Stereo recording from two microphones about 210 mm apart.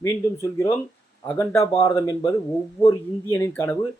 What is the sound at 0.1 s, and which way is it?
Speech, 15° left (ahead or behind).